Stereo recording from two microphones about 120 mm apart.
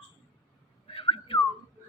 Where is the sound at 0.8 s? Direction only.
50° left (ahead or behind).